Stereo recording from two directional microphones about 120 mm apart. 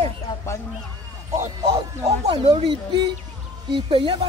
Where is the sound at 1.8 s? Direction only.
35° right (ahead or behind).